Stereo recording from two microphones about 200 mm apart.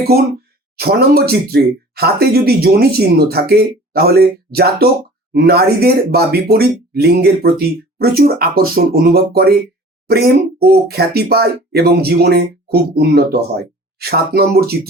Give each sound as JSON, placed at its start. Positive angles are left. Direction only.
{"t": 0.8, "sound": "speech", "side_deg": -50}